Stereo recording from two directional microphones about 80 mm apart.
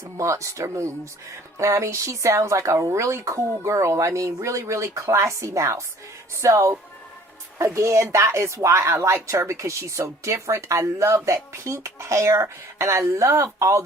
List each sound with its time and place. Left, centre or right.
0.2 s speech: right